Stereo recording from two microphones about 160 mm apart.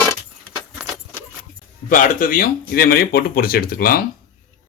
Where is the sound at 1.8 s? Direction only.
55° left (ahead or behind).